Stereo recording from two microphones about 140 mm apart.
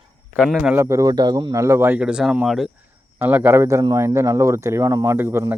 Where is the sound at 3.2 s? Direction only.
15° right (ahead or behind).